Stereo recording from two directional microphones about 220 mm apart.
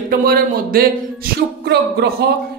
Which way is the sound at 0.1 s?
40° right (ahead or behind).